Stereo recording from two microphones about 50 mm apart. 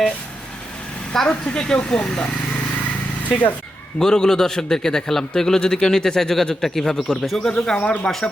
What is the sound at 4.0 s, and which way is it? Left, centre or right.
A man's voice, centre.